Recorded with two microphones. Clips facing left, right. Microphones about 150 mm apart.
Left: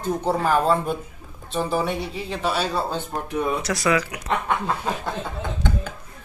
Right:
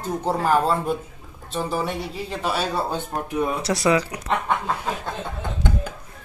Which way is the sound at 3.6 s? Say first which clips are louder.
Right 2 dB; 30° right (ahead or behind).